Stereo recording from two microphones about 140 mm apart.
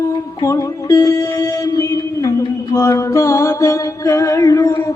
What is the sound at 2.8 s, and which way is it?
Music, 20° left (ahead or behind).